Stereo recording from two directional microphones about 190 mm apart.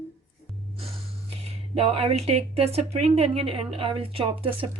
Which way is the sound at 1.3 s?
30° right (ahead or behind).